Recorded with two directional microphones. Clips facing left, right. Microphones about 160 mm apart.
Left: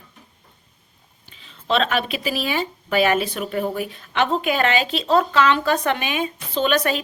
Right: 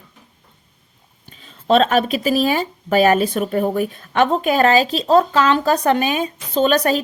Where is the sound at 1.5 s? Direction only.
45° right (ahead or behind).